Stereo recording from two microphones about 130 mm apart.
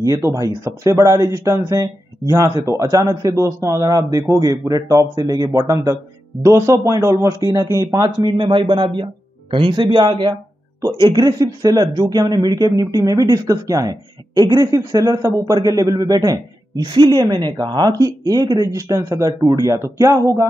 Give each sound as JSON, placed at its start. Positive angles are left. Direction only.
{"t": 0.0, "sound": "speech", "side_deg": -25}
{"t": 8.3, "sound": "speech", "side_deg": -40}